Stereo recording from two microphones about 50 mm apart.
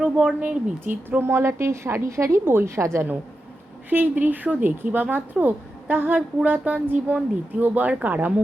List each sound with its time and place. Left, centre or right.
0.0 s speech: right
1.2 s a woman's voice: right
2.4 s a woman's voice: right
2.6 s a woman's voice: right
3.8 s a woman's voice: right